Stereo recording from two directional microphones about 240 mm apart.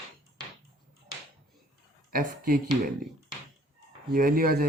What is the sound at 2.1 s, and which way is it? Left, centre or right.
Speech, right.